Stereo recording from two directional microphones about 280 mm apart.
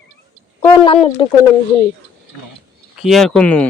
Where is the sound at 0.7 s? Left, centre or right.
Centre.